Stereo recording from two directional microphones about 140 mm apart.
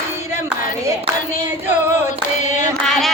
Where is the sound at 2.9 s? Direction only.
5° left (ahead or behind).